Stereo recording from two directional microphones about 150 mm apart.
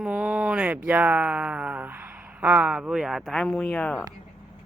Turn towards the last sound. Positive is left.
turn(degrees=5)  # may be behind; listen again after turning